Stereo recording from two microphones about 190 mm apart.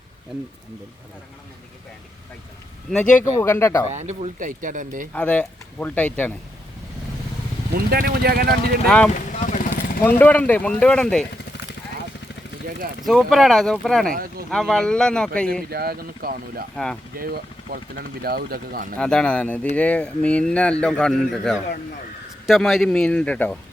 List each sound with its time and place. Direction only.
2.9 s speech: 5° left (ahead or behind)
3.9 s speech: 35° right (ahead or behind)
5.1 s speech: 5° left (ahead or behind)
7.7 s speech: 55° right (ahead or behind)
9.1 s vehicle: 40° left (ahead or behind)
10.0 s speech: 10° left (ahead or behind)
13.1 s speech: centre (ahead or behind)
14.1 s speech: 50° right (ahead or behind)
14.5 s speech: centre (ahead or behind)
15.7 s speech: 55° right (ahead or behind)
16.7 s speech: 5° left (ahead or behind)
17.2 s speech: 50° right (ahead or behind)
18.9 s speech: 5° left (ahead or behind)